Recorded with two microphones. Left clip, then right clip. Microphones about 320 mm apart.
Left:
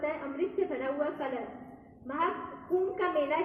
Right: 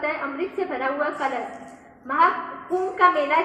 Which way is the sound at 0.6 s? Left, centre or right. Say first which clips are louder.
Right 9 dB; right.